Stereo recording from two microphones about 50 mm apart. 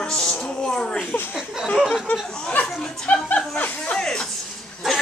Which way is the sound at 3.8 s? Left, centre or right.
Centre.